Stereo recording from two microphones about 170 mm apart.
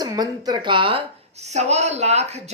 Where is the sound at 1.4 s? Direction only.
40° right (ahead or behind).